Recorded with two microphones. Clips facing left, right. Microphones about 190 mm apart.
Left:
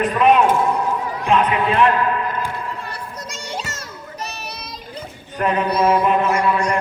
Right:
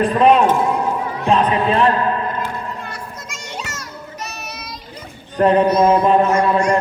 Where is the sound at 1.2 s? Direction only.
35° right (ahead or behind).